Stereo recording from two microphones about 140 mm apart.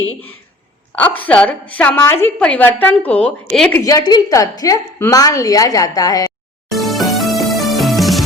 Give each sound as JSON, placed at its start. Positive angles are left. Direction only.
{"t": 0.9, "sound": "a woman's voice", "side_deg": 10}
{"t": 3.7, "sound": "a woman's voice", "side_deg": 20}
{"t": 6.7, "sound": "music", "side_deg": 0}